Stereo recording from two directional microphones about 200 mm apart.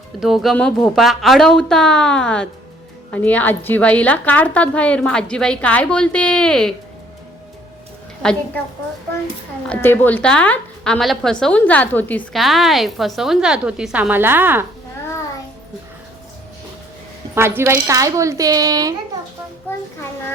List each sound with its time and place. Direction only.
0.2 s a woman's voice: centre (ahead or behind)
8.2 s a woman's voice: 5° left (ahead or behind)
9.6 s a woman's voice: 10° left (ahead or behind); by 14.6 s 10° right (ahead or behind)
17.3 s speech: 15° right (ahead or behind)